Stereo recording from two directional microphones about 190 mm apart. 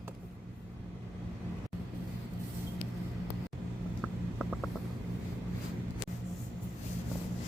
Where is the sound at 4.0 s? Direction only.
Centre (ahead or behind).